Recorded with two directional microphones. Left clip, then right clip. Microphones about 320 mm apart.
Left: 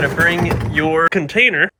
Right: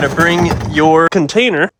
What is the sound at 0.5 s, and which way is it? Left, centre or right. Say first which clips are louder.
Speech: right 4 dB; right.